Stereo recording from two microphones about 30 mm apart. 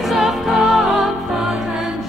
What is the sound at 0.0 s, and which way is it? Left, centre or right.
Music, centre.